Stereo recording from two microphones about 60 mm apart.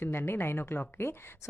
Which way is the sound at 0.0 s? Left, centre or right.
Left.